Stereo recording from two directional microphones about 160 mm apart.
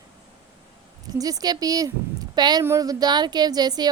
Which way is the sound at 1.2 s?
20° right (ahead or behind).